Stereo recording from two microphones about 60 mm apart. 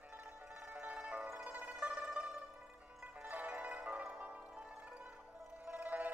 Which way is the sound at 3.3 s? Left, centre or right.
Right.